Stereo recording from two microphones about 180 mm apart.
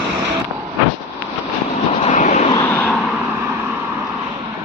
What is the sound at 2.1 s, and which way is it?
Vehicle, 45° left (ahead or behind).